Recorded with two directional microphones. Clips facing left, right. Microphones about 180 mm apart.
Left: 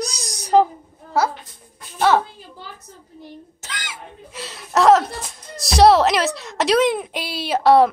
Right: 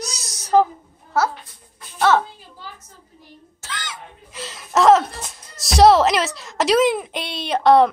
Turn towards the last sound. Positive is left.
turn(degrees=5)  # may be behind; listen again after turning